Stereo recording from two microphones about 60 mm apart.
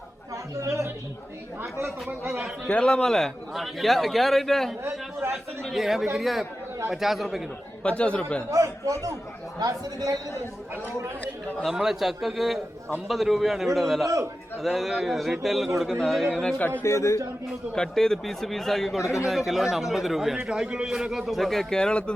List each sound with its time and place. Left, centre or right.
0.5 s a man's voice: right
2.6 s a man's voice: centre
4.8 s a sound: right
5.6 s a man's voice: centre
7.9 s speech: centre
8.4 s a man's voice: right
9.6 s speech: right
11.7 s a man's voice: centre
16.8 s a man's voice: left
17.7 s a man's voice: centre